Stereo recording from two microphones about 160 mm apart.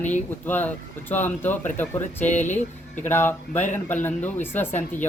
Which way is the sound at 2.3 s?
50° left (ahead or behind).